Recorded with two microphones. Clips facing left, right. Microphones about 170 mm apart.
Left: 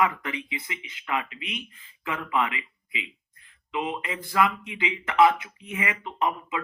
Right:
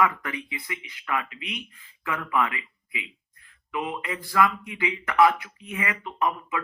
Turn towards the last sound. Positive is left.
turn(degrees=20)  # may be behind; listen again after turning